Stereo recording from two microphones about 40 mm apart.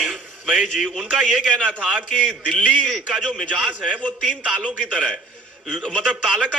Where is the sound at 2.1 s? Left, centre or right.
Left.